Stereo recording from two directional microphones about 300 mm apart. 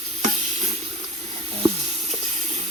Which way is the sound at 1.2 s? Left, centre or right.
Right.